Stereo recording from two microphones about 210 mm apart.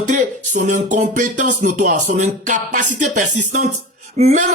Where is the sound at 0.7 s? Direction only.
35° right (ahead or behind).